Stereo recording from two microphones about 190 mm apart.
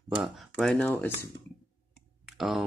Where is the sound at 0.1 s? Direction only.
Centre (ahead or behind).